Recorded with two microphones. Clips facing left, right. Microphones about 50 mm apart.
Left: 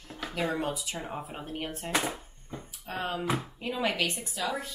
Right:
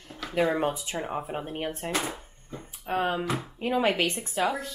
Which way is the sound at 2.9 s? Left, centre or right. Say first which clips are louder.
Right 4 dB; right.